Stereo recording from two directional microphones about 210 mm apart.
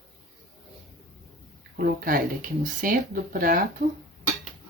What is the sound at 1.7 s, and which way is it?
Speech, 45° right (ahead or behind).